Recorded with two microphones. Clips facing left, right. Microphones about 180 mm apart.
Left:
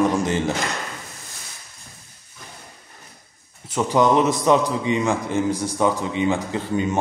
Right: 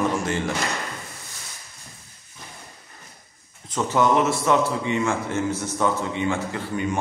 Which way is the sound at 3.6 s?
10° left (ahead or behind).